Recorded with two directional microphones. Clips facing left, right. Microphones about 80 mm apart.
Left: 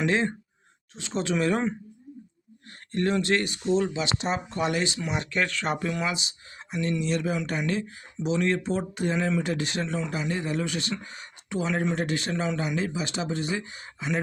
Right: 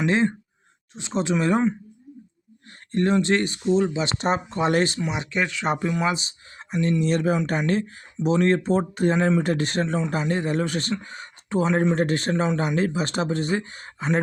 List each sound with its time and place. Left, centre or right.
0.0 s speech: right
2.9 s speech: right
3.7 s speech: centre
4.0 s speech: right
4.9 s speech: centre
6.1 s speech: right
7.0 s speech: right
11.9 s speech: right